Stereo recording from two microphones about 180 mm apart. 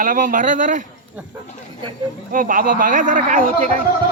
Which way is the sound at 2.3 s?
50° right (ahead or behind).